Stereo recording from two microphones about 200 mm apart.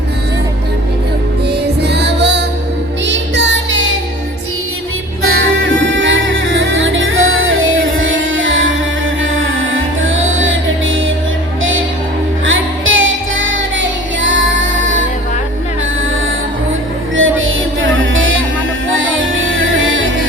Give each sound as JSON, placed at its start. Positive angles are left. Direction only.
{"t": 1.5, "sound": "music", "side_deg": -55}
{"t": 3.1, "sound": "child singing", "side_deg": -60}
{"t": 5.2, "sound": "music", "side_deg": -85}
{"t": 12.5, "sound": "music", "side_deg": -75}
{"t": 17.2, "sound": "music", "side_deg": -80}